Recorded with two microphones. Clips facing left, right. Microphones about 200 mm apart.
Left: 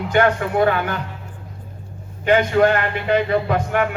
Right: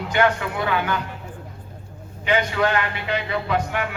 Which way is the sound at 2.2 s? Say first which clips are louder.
Left 6 dB; 50° left (ahead or behind).